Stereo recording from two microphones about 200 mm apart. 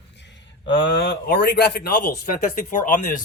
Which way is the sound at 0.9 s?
55° left (ahead or behind).